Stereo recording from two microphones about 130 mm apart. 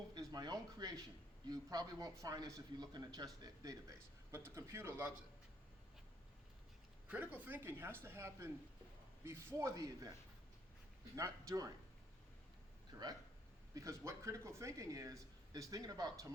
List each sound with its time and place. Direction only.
0.1 s speech: 30° right (ahead or behind)
7.1 s speech: 15° right (ahead or behind)
11.1 s speech: 25° right (ahead or behind)
12.9 s speech: 20° right (ahead or behind)